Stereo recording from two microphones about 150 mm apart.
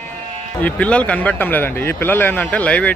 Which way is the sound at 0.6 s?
10° left (ahead or behind).